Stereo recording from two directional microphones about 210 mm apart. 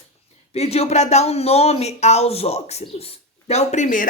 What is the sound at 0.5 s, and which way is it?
Speech, 30° left (ahead or behind).